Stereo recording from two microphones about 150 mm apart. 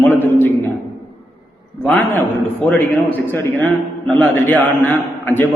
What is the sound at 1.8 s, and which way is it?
A man's voice, 10° left (ahead or behind).